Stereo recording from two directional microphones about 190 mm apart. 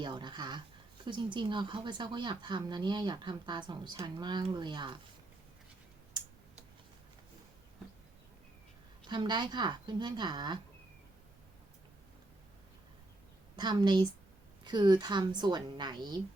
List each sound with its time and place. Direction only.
0.0 s speech: 25° right (ahead or behind)
9.0 s speech: 25° right (ahead or behind)
13.6 s speech: 20° right (ahead or behind)